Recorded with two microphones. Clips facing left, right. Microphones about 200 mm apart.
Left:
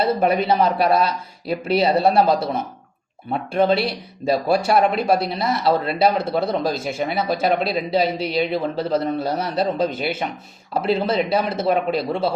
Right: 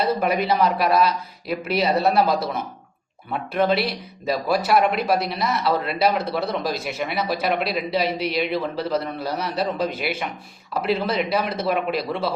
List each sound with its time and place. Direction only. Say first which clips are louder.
0.0 s a man's voice: left 3 dB; 25° left (ahead or behind)